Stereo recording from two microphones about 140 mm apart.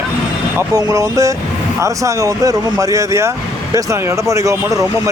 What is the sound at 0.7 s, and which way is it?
A man's voice, 25° right (ahead or behind).